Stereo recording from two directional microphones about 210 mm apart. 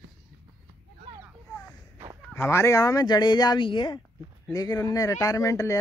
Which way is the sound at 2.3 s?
15° left (ahead or behind).